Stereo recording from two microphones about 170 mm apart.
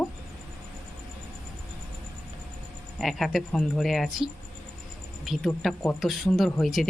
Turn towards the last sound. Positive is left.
turn(degrees=0)  # may be behind; listen again after turning